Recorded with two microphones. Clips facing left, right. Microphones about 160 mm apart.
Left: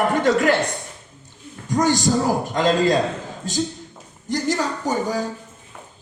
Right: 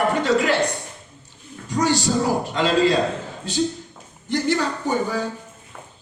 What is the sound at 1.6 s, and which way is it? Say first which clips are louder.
Speech: left 2 dB; 45° left (ahead or behind).